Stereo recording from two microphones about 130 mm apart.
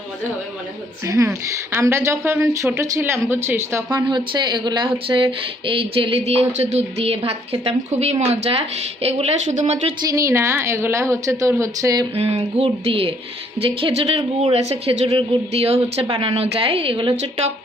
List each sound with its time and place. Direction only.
1.0 s a woman's voice: 25° right (ahead or behind); by 9.9 s 55° right (ahead or behind)
10.1 s a woman's voice: 25° right (ahead or behind)
12.1 s a woman's voice: 50° right (ahead or behind)